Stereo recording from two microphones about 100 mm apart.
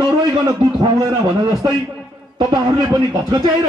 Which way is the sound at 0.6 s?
45° right (ahead or behind).